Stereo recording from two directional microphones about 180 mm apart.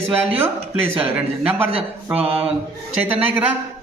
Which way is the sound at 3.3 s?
10° right (ahead or behind).